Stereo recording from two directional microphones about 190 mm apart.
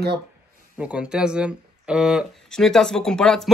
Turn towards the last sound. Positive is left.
turn(degrees=5)  # may be behind; listen again after turning